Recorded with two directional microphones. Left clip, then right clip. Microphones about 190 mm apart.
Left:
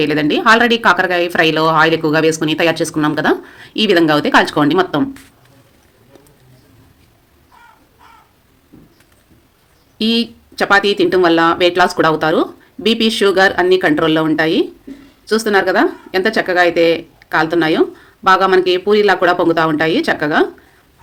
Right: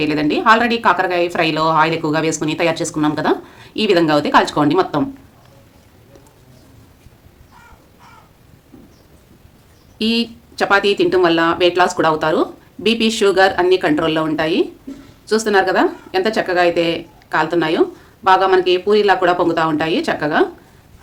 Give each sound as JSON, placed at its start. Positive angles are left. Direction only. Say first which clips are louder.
{"t": 0.0, "sound": "a woman's voice", "louder": "left 2 dB", "side_deg": 25}
{"t": 10.0, "sound": "a woman's voice", "louder": "left 2 dB", "side_deg": 20}